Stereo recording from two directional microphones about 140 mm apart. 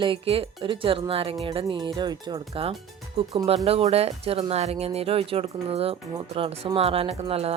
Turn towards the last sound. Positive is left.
turn(degrees=-45)  # may be behind; listen again after turning